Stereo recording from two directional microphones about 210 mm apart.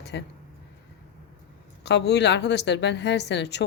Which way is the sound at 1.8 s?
55° left (ahead or behind).